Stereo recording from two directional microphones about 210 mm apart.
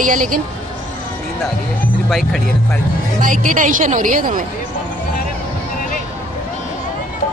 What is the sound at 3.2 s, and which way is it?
A woman's voice, 40° right (ahead or behind).